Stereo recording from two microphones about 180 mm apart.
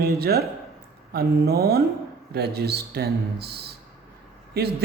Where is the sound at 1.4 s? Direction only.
60° right (ahead or behind).